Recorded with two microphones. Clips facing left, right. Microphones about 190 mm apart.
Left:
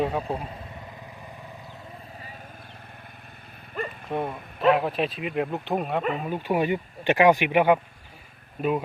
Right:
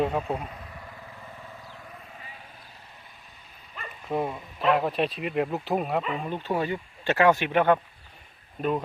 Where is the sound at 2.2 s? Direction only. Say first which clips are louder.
Left 3 dB; 40° left (ahead or behind).